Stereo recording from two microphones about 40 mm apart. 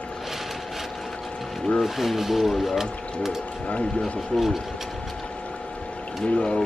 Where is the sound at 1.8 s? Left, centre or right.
Centre.